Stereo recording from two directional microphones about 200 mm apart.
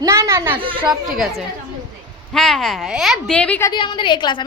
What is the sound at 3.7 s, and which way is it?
Speech, 25° left (ahead or behind).